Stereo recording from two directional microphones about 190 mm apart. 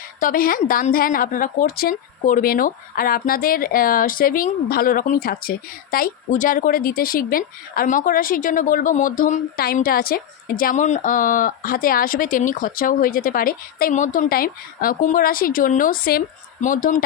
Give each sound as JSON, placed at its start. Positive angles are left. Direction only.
{"t": 0.2, "sound": "a woman's voice", "side_deg": 50}